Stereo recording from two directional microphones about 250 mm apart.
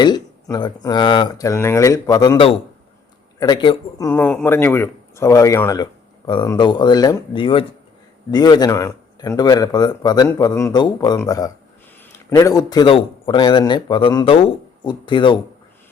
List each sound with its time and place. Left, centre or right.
0.0 s a man's voice: centre